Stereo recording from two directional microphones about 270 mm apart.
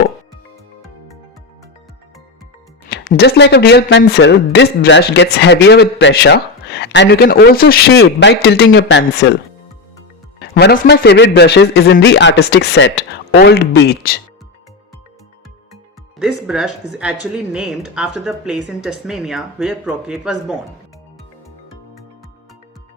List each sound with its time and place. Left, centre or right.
2.9 s speech: left
10.5 s speech: left
16.1 s speech: centre